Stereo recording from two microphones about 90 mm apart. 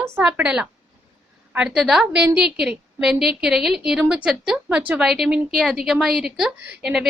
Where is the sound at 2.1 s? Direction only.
10° right (ahead or behind).